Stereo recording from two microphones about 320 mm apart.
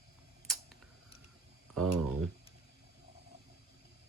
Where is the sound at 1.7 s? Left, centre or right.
Centre.